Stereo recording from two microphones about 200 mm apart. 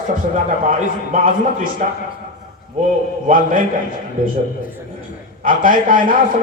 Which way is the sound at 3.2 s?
45° right (ahead or behind).